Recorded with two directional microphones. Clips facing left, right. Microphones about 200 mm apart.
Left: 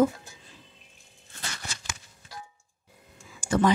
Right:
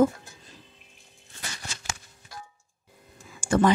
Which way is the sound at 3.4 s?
50° right (ahead or behind).